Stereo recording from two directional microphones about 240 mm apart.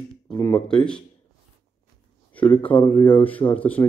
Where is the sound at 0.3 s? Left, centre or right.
Centre.